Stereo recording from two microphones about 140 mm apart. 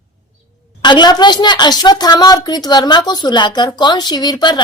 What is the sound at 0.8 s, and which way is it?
A woman's voice, 30° left (ahead or behind).